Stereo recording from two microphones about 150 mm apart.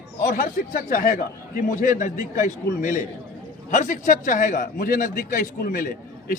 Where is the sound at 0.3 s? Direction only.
60° left (ahead or behind).